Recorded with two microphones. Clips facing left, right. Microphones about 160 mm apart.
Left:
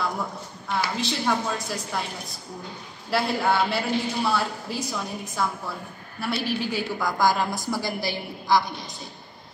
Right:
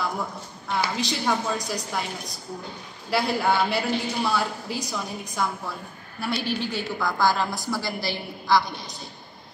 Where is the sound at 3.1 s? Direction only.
Centre (ahead or behind); by 8.9 s 20° left (ahead or behind).